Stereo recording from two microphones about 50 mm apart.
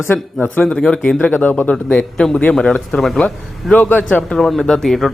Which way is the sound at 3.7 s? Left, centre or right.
Left.